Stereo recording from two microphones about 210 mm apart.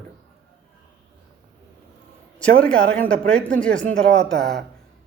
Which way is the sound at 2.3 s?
5° left (ahead or behind).